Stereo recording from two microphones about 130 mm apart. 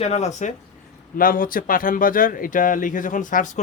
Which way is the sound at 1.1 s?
90° left.